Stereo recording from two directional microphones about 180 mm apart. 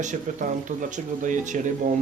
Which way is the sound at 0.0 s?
45° right (ahead or behind).